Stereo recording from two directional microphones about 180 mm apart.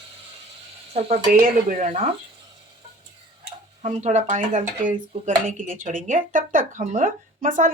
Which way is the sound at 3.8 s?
40° right (ahead or behind).